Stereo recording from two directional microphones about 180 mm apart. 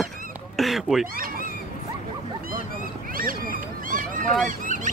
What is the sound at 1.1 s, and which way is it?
Speech, 50° right (ahead or behind).